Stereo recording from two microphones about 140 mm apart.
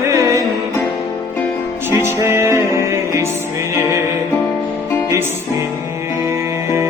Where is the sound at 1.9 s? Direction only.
20° right (ahead or behind).